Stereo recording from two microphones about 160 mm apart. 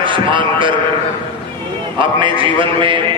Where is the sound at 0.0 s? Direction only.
30° right (ahead or behind).